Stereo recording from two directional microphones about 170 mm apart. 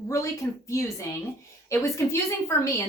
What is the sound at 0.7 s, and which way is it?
A woman's voice, 20° left (ahead or behind).